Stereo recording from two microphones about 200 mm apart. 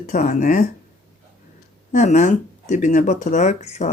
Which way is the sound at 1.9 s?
35° left (ahead or behind).